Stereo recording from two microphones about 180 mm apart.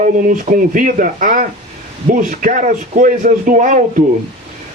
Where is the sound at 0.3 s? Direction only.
45° right (ahead or behind).